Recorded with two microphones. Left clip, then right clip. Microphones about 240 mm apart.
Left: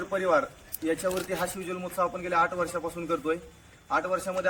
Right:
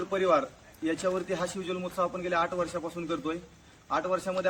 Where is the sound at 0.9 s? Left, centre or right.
Centre.